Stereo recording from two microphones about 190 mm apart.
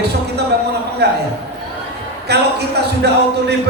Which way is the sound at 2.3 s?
60° right (ahead or behind).